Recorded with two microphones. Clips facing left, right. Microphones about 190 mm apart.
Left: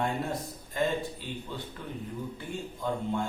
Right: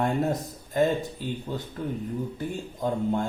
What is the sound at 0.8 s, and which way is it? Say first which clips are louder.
Speech: right 6 dB; 45° right (ahead or behind).